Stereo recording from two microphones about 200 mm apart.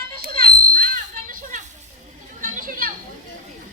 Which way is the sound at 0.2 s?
45° right (ahead or behind).